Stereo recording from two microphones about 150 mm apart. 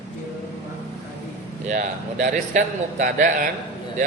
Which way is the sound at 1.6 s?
55° right (ahead or behind).